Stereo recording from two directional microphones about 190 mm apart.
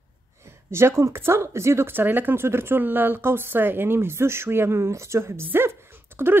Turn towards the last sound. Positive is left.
turn(degrees=-10)  # may be behind; listen again after turning